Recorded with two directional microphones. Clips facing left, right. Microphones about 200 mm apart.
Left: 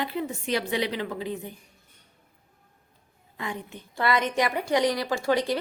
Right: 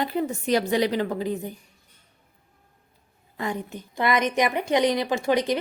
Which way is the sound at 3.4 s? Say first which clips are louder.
Right 5 dB; 40° right (ahead or behind).